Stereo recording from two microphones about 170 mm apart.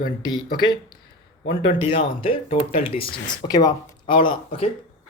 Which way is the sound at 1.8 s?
35° left (ahead or behind).